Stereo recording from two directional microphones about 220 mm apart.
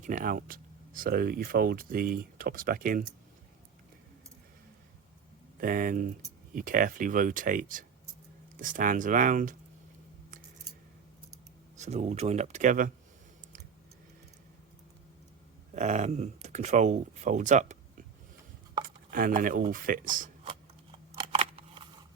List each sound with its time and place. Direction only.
0.0 s speech: 40° right (ahead or behind)
5.5 s speech: 40° right (ahead or behind)
11.8 s speech: 30° right (ahead or behind)
15.7 s speech: 35° right (ahead or behind)
19.1 s speech: 40° right (ahead or behind)
20.9 s scissors: 25° right (ahead or behind)